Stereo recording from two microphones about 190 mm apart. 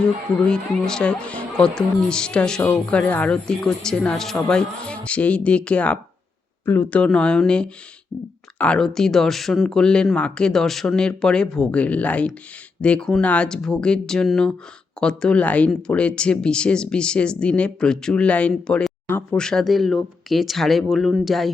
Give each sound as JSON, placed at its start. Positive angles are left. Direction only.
{"t": 0.0, "sound": "speech", "side_deg": 5}